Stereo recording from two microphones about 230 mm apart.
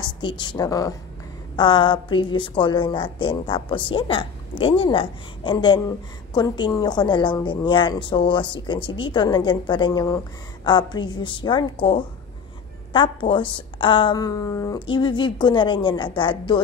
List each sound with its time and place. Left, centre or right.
0.0 s a woman's voice: centre